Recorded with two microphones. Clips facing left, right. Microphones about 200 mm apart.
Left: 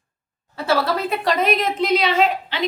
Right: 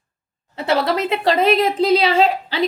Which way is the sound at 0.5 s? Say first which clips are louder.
Right 2 dB; 20° right (ahead or behind).